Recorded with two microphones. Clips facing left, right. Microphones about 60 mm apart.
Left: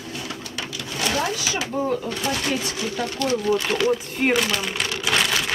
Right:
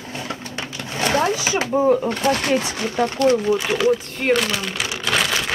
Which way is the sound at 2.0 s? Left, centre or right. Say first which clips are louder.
Right 5 dB; right.